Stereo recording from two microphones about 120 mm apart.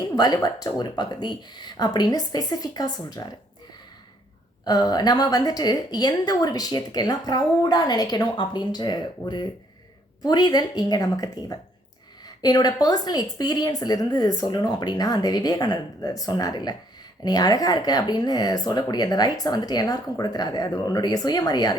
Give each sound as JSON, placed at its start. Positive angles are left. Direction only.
{"t": 0.0, "sound": "a woman's voice", "side_deg": 35}
{"t": 4.6, "sound": "a woman's voice", "side_deg": 35}